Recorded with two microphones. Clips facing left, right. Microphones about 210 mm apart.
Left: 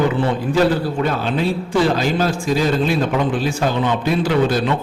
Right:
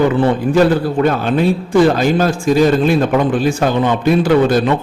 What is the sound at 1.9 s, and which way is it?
A man's voice, 50° right (ahead or behind).